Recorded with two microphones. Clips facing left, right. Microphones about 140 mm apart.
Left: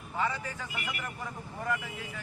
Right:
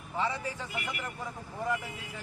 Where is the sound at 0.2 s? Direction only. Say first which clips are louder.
Even; 25° right (ahead or behind).